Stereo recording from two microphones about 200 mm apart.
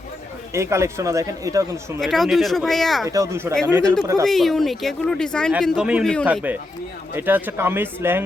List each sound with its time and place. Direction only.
0.5 s speech: 15° right (ahead or behind)
2.0 s speech: centre (ahead or behind)
3.1 s speech: 15° right (ahead or behind)
4.3 s speech: centre (ahead or behind)